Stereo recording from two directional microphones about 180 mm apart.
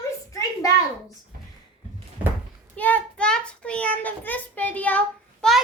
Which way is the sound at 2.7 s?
10° left (ahead or behind).